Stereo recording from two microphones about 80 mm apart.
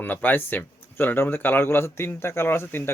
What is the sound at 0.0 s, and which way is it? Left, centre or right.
Speech, left.